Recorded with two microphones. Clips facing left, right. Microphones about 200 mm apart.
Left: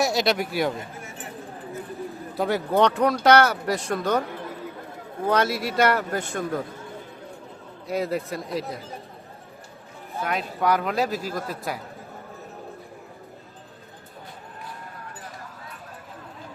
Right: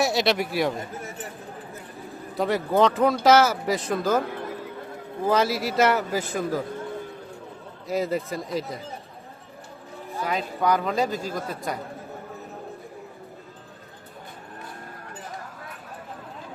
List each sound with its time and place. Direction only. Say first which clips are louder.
0.0 s speech: even; centre (ahead or behind)
2.3 s speech: even; centre (ahead or behind)
5.2 s speech: right 1 dB; centre (ahead or behind)
7.9 s speech: right 1 dB; centre (ahead or behind)
10.2 s speech: even; centre (ahead or behind)